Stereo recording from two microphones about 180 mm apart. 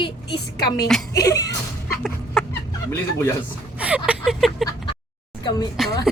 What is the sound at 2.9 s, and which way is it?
Speech, 15° left (ahead or behind).